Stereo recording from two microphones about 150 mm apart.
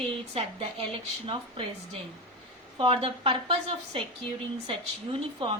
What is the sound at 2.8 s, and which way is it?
Speech, 35° right (ahead or behind).